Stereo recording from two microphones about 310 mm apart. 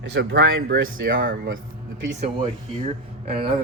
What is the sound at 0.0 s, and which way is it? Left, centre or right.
Speech, right.